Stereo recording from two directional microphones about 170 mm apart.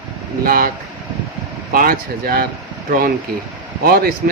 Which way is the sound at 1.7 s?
60° right (ahead or behind).